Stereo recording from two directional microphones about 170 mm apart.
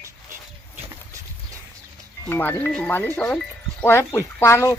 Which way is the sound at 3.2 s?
5° left (ahead or behind).